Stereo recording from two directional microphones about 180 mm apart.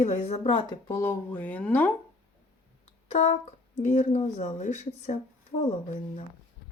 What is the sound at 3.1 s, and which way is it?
A woman's voice, 35° left (ahead or behind).